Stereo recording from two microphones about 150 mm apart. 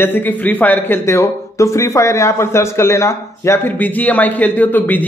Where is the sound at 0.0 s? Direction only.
15° left (ahead or behind).